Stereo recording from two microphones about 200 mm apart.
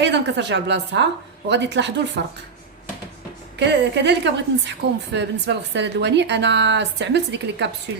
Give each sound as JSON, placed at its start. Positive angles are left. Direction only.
{"t": 0.0, "sound": "a woman's voice", "side_deg": -60}
{"t": 3.6, "sound": "a woman's voice", "side_deg": -60}